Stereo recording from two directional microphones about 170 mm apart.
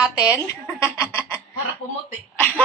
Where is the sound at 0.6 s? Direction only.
15° left (ahead or behind).